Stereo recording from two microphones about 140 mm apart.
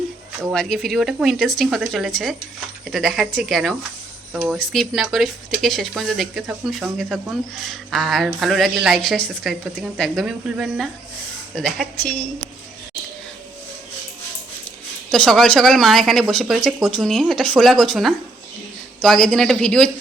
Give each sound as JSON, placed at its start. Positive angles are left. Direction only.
{"t": 0.5, "sound": "speech", "side_deg": 5}
{"t": 15.1, "sound": "speech", "side_deg": 5}